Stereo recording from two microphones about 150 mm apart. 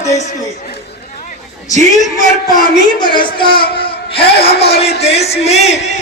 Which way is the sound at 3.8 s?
40° left (ahead or behind).